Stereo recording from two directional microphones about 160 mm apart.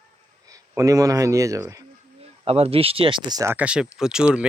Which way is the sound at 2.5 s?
40° right (ahead or behind).